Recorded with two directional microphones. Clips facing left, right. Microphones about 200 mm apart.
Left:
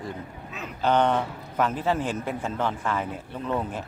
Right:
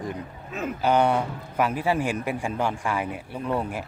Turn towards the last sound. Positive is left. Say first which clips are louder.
# right 1 dB
turn(degrees=-10)  # may be behind; listen again after turning